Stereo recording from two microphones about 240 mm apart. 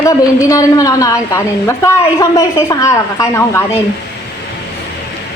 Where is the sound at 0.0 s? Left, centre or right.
Centre.